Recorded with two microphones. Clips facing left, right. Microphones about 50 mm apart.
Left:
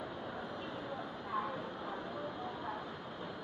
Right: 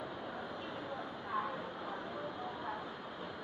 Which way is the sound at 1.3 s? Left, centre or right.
Centre.